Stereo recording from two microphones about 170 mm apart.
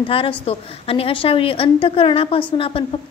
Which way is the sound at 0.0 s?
30° left (ahead or behind).